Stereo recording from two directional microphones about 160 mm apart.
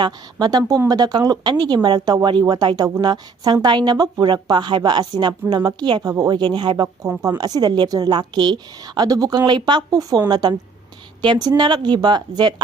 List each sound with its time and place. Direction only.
0.0 s a woman's voice: 25° right (ahead or behind)
6.8 s a woman's voice: 20° right (ahead or behind)